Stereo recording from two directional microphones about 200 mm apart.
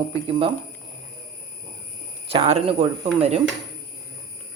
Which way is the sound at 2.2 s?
25° right (ahead or behind).